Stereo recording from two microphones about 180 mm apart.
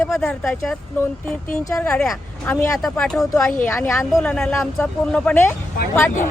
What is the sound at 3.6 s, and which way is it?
Speech, 15° left (ahead or behind).